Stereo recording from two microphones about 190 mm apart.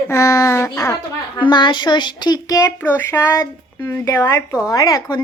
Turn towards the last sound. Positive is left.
turn(degrees=20)  # may be behind; listen again after turning